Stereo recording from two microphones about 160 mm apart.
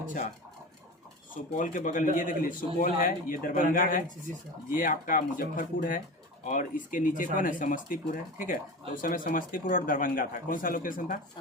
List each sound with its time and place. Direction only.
0.0 s speech: 55° left (ahead or behind)
1.3 s a man's voice: 55° left (ahead or behind)